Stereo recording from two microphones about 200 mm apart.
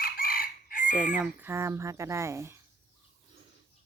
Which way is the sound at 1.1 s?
10° right (ahead or behind).